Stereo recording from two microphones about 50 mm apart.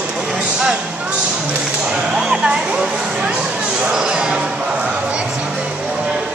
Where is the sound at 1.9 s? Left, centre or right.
Centre.